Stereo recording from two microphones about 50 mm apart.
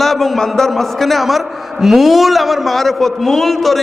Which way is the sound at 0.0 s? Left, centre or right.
Centre.